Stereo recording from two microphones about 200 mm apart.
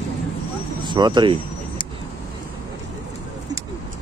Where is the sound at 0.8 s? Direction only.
20° right (ahead or behind).